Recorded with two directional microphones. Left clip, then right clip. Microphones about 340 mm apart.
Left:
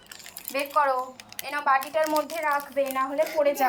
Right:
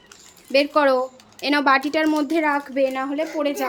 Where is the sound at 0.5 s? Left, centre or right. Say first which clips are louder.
Right 7 dB; centre.